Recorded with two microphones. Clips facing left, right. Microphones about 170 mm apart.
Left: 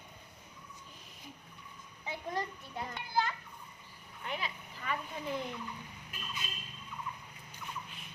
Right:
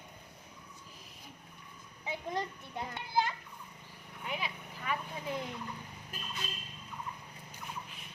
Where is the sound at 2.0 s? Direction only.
20° right (ahead or behind).